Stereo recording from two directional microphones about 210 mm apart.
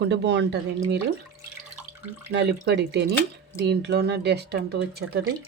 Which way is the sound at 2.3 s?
55° right (ahead or behind).